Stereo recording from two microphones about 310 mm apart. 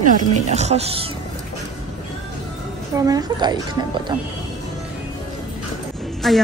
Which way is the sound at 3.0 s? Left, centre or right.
Centre.